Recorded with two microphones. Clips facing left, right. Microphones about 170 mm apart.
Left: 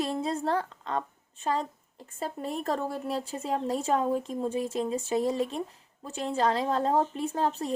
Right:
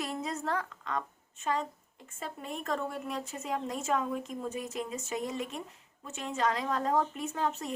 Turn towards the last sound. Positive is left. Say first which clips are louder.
# left 4 dB
turn(degrees=35)  # may be behind; listen again after turning